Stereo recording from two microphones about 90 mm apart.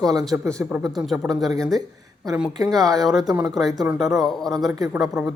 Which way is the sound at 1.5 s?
40° right (ahead or behind).